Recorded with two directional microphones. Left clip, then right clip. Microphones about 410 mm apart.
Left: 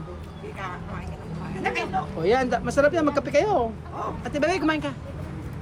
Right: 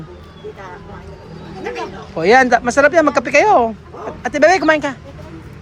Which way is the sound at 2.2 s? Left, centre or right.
Centre.